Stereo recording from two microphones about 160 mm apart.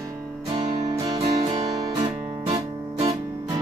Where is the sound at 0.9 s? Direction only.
20° right (ahead or behind).